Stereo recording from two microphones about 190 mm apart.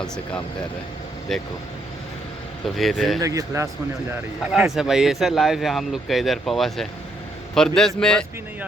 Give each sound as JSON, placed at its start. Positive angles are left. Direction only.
{"t": 1.3, "sound": "speech", "side_deg": 0}
{"t": 2.6, "sound": "speech", "side_deg": 0}
{"t": 3.2, "sound": "speech", "side_deg": -20}
{"t": 4.5, "sound": "speech", "side_deg": 0}